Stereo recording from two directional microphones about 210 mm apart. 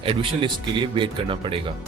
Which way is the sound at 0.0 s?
25° right (ahead or behind).